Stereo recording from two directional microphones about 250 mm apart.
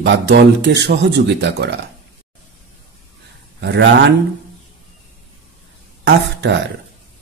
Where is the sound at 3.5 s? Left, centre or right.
Right.